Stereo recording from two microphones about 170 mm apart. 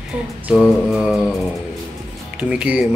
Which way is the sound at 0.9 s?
5° right (ahead or behind).